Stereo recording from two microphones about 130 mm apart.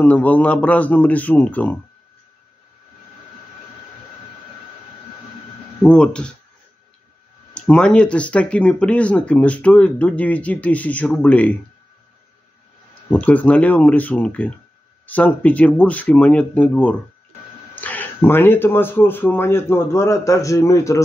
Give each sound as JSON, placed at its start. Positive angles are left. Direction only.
{"t": 0.0, "sound": "speech", "side_deg": 10}
{"t": 5.8, "sound": "speech", "side_deg": 5}
{"t": 7.5, "sound": "speech", "side_deg": 10}
{"t": 13.1, "sound": "speech", "side_deg": 10}